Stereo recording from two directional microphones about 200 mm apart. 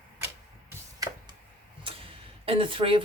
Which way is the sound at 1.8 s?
25° right (ahead or behind).